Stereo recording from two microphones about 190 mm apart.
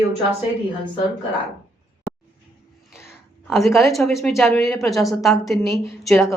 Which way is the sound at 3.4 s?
Centre (ahead or behind).